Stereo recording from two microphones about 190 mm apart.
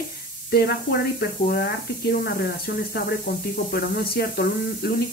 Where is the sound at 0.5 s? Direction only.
55° left (ahead or behind).